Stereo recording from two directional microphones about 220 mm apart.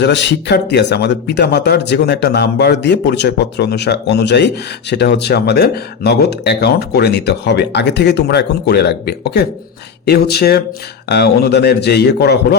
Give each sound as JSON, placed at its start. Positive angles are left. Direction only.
{"t": 0.0, "sound": "speech", "side_deg": 55}